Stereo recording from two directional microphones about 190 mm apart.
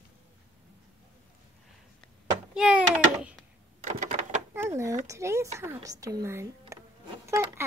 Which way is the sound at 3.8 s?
40° right (ahead or behind).